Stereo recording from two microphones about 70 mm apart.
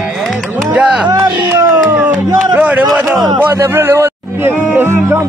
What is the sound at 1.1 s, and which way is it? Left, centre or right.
Speech, right.